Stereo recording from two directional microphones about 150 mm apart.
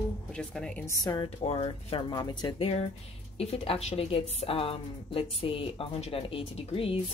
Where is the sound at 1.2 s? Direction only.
40° left (ahead or behind).